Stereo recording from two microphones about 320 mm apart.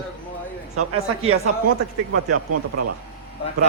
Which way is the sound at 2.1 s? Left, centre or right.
Right.